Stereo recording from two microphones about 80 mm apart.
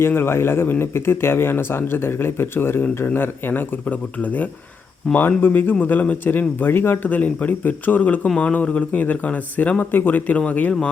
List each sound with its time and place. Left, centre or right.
0.0 s speech: left